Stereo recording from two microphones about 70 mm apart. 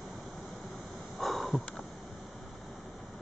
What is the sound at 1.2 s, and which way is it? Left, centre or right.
Sniff, centre.